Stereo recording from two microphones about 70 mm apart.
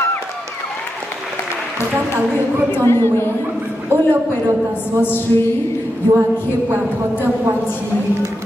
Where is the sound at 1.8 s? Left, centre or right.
Right.